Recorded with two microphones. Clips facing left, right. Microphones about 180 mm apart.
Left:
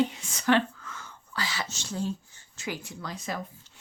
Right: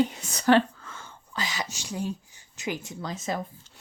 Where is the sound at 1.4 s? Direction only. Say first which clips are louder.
Right 2 dB; 15° right (ahead or behind).